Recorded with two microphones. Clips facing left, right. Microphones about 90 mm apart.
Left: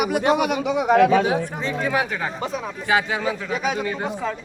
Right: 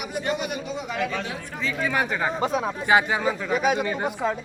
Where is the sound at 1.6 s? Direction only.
35° left (ahead or behind).